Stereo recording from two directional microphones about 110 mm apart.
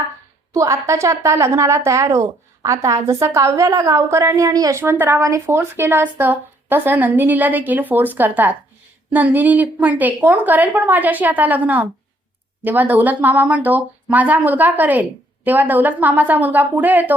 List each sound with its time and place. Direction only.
0.5 s a woman's voice: 30° right (ahead or behind)
4.8 s speech: 20° right (ahead or behind)